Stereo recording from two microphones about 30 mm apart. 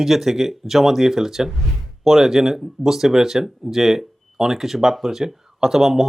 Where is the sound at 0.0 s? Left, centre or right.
Centre.